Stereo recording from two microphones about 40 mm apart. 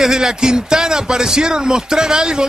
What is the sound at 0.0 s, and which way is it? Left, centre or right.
Speech, centre.